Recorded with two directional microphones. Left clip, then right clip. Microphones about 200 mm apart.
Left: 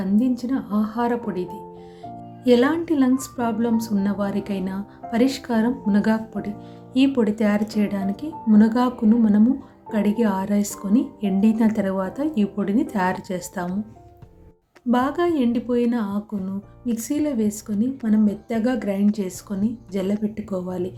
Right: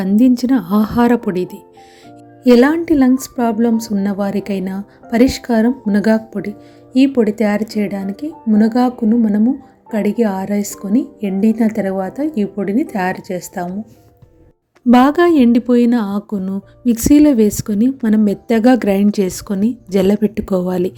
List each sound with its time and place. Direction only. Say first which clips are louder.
0.0 s a woman's voice: right 9 dB; 40° right (ahead or behind); by 13.7 s 20° right (ahead or behind)
14.8 s speech: right 10 dB; 40° right (ahead or behind)